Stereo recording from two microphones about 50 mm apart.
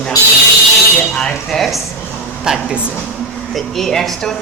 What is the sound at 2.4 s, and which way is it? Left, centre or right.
Speech, centre.